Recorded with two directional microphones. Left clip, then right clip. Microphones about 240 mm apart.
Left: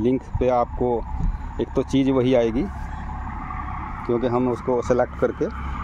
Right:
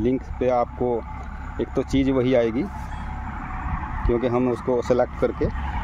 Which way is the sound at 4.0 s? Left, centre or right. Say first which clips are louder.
Even; centre.